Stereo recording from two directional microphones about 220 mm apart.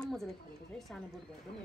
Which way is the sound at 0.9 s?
5° left (ahead or behind).